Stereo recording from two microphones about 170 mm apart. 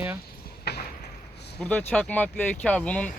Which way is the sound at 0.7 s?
75° left (ahead or behind).